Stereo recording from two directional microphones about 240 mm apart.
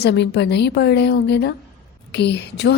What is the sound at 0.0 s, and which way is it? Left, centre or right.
A woman's voice, left.